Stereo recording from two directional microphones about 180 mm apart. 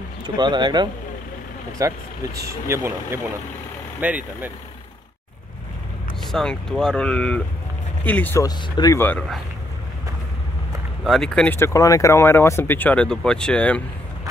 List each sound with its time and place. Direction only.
0.4 s speech: 25° right (ahead or behind); by 4.5 s 10° right (ahead or behind)
6.2 s speech: 5° left (ahead or behind)
8.5 s speech: 20° left (ahead or behind)
11.1 s speech: 5° left (ahead or behind)